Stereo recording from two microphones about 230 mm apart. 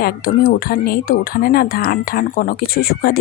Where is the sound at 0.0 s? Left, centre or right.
Left.